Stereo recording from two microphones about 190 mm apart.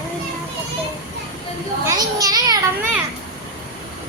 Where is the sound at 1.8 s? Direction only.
20° right (ahead or behind).